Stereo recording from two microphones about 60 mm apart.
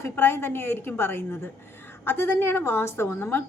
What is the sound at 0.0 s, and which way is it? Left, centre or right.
A woman's voice, left.